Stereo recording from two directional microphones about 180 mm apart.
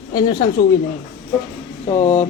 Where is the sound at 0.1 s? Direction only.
25° left (ahead or behind).